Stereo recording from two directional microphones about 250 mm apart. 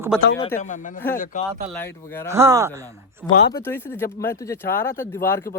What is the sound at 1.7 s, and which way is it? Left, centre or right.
Speech, centre.